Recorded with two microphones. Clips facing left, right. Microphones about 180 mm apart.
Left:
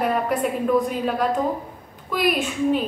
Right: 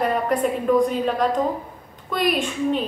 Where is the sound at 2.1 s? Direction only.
5° left (ahead or behind).